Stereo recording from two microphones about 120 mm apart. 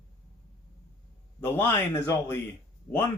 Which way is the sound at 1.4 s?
20° left (ahead or behind).